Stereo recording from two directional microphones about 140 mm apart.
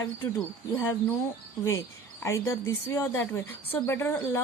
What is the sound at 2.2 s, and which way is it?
Speech, 20° left (ahead or behind).